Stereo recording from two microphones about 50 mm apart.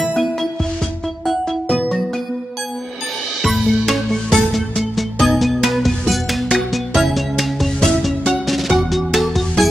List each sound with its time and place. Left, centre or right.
0.0 s music: centre
3.4 s music: centre